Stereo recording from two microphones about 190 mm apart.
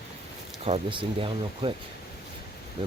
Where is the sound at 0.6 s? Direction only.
30° right (ahead or behind).